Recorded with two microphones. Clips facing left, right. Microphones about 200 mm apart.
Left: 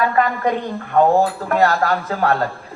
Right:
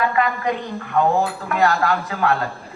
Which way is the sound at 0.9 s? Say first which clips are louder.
Left 4 dB; 45° left (ahead or behind).